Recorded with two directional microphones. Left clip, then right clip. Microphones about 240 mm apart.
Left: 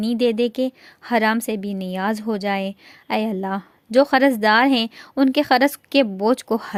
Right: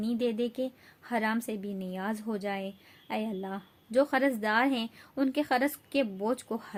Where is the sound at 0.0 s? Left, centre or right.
Left.